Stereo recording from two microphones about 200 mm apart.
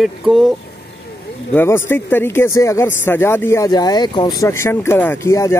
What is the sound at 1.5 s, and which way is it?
Speech, 10° left (ahead or behind).